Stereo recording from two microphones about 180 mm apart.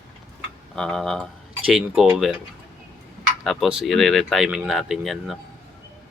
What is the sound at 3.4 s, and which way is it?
Speech, centre (ahead or behind).